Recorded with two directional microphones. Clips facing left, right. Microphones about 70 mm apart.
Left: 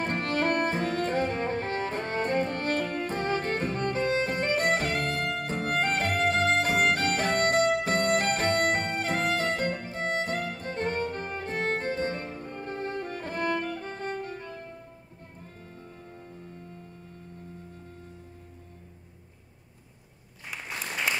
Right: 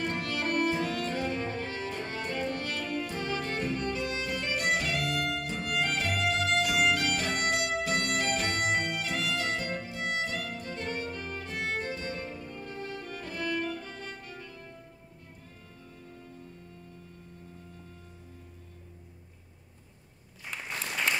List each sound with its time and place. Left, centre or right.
0.0 s music: left